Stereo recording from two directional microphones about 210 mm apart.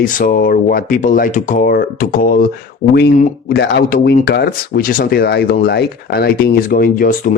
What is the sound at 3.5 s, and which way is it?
Speech, 50° left (ahead or behind).